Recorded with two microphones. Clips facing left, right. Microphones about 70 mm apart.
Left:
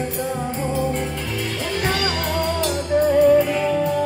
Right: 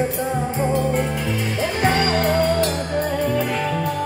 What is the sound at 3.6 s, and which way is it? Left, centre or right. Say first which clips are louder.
Music: left 3 dB; right.